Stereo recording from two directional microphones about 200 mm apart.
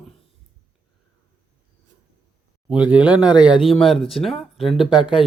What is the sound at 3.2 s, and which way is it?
Speech, 20° left (ahead or behind).